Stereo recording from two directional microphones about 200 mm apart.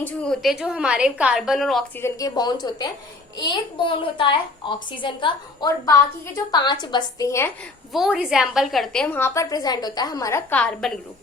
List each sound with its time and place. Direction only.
0.0 s a woman's voice: 5° left (ahead or behind)
2.0 s a woman's voice: 15° left (ahead or behind)
7.9 s a woman's voice: centre (ahead or behind)